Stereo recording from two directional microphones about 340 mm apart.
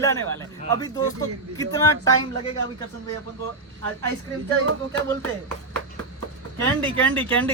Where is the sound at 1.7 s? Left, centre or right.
Centre.